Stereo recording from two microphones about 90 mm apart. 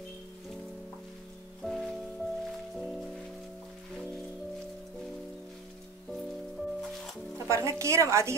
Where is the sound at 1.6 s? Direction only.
Centre (ahead or behind).